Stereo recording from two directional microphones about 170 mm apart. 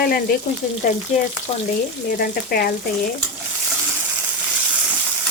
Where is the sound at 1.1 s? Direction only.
45° left (ahead or behind).